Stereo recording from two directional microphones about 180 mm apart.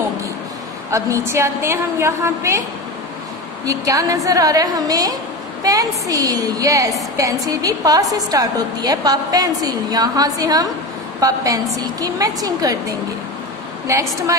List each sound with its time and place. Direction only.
0.9 s a woman's voice: 15° right (ahead or behind)
3.6 s a woman's voice: 20° right (ahead or behind)
13.8 s a woman's voice: 15° right (ahead or behind)